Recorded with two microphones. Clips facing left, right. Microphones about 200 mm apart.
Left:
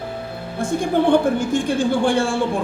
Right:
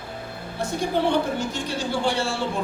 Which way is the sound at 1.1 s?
50° left (ahead or behind).